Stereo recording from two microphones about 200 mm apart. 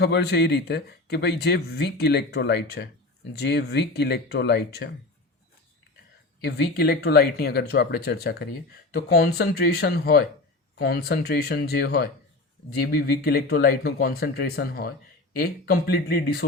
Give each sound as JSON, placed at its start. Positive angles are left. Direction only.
{"t": 0.0, "sound": "speech", "side_deg": 55}
{"t": 6.4, "sound": "speech", "side_deg": 55}